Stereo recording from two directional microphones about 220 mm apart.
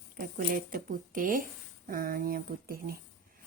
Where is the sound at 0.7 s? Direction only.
40° right (ahead or behind).